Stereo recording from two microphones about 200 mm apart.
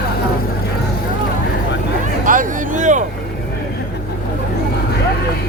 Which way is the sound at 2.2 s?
40° right (ahead or behind).